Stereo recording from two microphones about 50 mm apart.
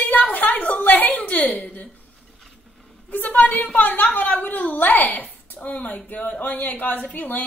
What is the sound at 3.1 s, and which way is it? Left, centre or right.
A woman's voice, left.